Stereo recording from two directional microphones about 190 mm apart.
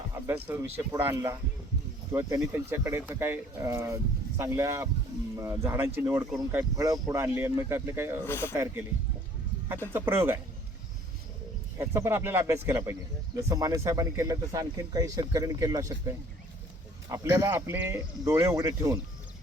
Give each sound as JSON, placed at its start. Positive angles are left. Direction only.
{"t": 0.3, "sound": "speech", "side_deg": -10}
{"t": 2.4, "sound": "speech", "side_deg": -10}
{"t": 8.2, "sound": "speech", "side_deg": 10}
{"t": 8.5, "sound": "speech", "side_deg": -15}
{"t": 9.9, "sound": "speech", "side_deg": -10}
{"t": 11.8, "sound": "speech", "side_deg": -15}
{"t": 17.1, "sound": "speech", "side_deg": -15}